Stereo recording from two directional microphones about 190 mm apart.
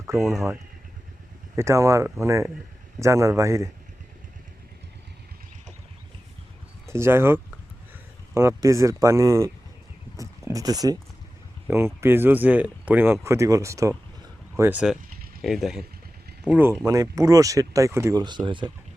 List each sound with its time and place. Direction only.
0.1 s speech: 15° right (ahead or behind)
1.5 s speech: 15° right (ahead or behind)
6.8 s speech: 15° right (ahead or behind)
11.9 s speech: 10° right (ahead or behind)